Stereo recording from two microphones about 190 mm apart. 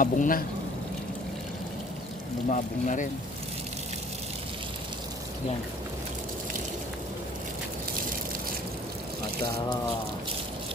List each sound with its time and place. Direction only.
0.0 s speech: 45° left (ahead or behind)
2.5 s speech: 40° left (ahead or behind)